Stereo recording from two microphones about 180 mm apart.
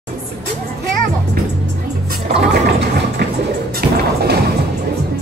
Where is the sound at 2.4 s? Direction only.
70° right (ahead or behind).